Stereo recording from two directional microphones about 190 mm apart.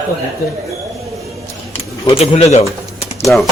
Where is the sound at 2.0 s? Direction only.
35° left (ahead or behind).